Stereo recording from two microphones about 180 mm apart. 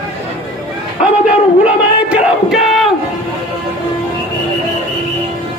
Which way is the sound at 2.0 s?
5° right (ahead or behind).